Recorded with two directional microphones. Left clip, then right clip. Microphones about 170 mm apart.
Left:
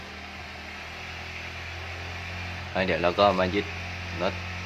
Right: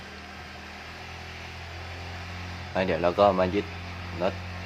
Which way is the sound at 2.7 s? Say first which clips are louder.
Even; 15° right (ahead or behind).